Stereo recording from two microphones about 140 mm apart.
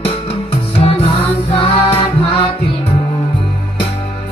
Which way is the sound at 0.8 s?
40° left (ahead or behind).